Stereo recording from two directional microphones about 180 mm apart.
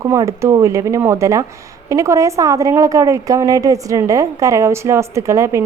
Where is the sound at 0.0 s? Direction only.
15° right (ahead or behind).